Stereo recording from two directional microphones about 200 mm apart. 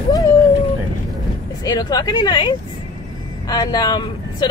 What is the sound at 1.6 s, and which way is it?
A woman's voice, 20° left (ahead or behind).